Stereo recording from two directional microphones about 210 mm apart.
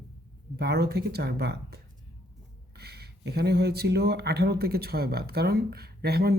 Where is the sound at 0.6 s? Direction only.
50° right (ahead or behind).